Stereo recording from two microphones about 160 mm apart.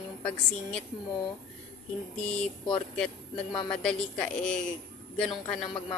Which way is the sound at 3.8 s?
5° left (ahead or behind).